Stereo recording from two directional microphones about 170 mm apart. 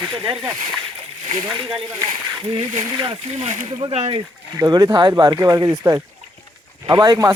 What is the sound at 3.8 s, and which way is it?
Speech, 35° right (ahead or behind).